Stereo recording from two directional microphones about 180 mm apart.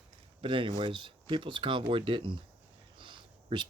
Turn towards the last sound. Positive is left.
turn(degrees=-25)  # may be behind; listen again after turning